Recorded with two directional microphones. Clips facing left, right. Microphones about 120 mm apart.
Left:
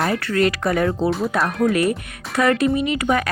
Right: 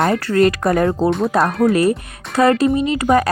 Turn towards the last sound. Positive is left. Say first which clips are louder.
# right 5 dB
turn(degrees=-35)  # may be behind; listen again after turning